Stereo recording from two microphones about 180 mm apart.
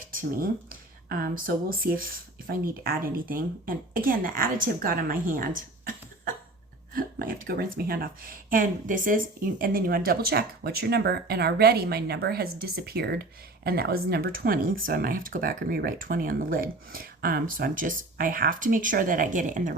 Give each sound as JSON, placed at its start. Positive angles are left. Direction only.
{"t": 0.0, "sound": "speech", "side_deg": -50}